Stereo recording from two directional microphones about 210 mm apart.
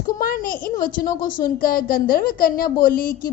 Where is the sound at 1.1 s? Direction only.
20° left (ahead or behind).